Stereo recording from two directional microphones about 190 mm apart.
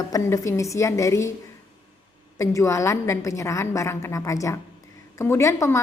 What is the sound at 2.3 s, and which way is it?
A woman's voice, 15° left (ahead or behind).